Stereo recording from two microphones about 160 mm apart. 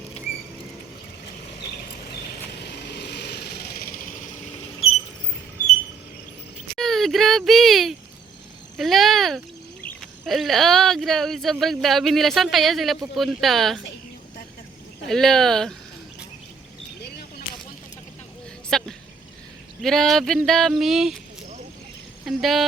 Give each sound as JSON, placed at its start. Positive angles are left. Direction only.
{"t": 2.6, "sound": "vehicle", "side_deg": 90}
{"t": 6.7, "sound": "speech", "side_deg": 0}
{"t": 8.8, "sound": "a sound", "side_deg": 0}
{"t": 9.8, "sound": "speech", "side_deg": 0}
{"t": 15.0, "sound": "speech", "side_deg": 5}
{"t": 18.7, "sound": "a sound", "side_deg": 5}
{"t": 19.8, "sound": "speech", "side_deg": 0}
{"t": 22.2, "sound": "speech", "side_deg": 0}